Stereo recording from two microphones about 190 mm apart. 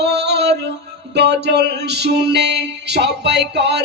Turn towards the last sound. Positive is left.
turn(degrees=-65)  # may be behind; listen again after turning